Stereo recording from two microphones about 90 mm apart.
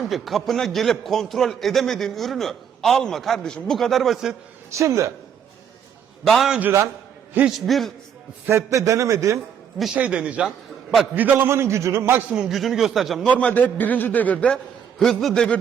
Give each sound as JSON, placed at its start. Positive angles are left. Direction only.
{"t": 0.0, "sound": "a man's voice", "side_deg": 0}
{"t": 4.7, "sound": "a man's voice", "side_deg": -35}
{"t": 6.2, "sound": "a man's voice", "side_deg": 0}
{"t": 8.4, "sound": "a man's voice", "side_deg": -35}
{"t": 9.9, "sound": "speech", "side_deg": -15}
{"t": 11.1, "sound": "a man's voice", "side_deg": -25}
{"t": 12.3, "sound": "a man's voice", "side_deg": -5}
{"t": 13.2, "sound": "a man's voice", "side_deg": 15}
{"t": 14.9, "sound": "a man's voice", "side_deg": 5}